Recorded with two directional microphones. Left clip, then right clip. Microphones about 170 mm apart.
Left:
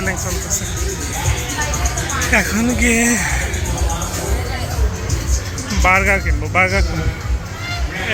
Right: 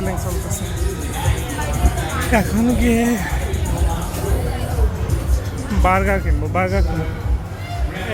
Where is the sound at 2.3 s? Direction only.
20° right (ahead or behind).